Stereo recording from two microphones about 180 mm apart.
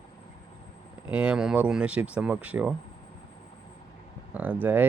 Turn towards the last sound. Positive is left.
turn(degrees=-10)  # may be behind; listen again after turning